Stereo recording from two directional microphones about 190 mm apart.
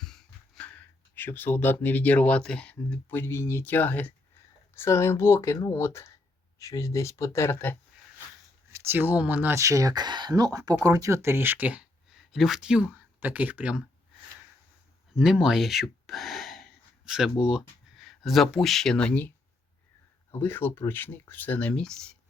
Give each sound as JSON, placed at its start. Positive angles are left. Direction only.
{"t": 0.0, "sound": "speech", "side_deg": 0}
{"t": 8.7, "sound": "speech", "side_deg": -10}
{"t": 15.1, "sound": "gasp", "side_deg": -5}
{"t": 17.4, "sound": "speech", "side_deg": 0}
{"t": 20.4, "sound": "speech", "side_deg": 10}